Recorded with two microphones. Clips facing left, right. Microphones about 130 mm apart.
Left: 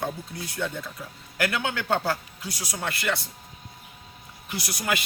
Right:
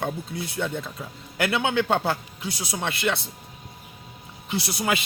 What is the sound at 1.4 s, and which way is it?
A man's voice, 25° right (ahead or behind).